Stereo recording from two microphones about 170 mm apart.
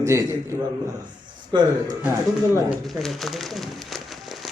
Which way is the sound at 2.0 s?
10° right (ahead or behind).